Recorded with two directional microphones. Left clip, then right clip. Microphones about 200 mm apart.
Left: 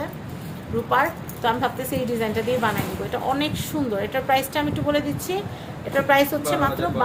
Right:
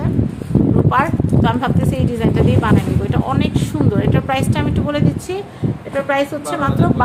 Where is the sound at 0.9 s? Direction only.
35° right (ahead or behind).